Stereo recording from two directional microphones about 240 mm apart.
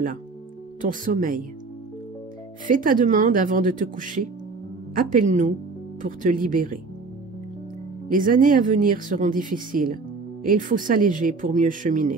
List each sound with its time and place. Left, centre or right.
0.7 s speech: right
2.6 s speech: right
8.1 s speech: right